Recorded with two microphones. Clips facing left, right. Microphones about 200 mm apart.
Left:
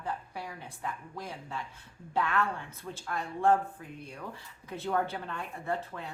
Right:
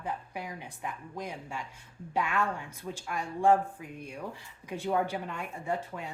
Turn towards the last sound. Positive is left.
turn(degrees=-15)  # may be behind; listen again after turning